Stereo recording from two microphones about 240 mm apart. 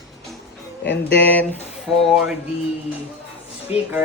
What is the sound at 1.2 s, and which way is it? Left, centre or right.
Speech, centre.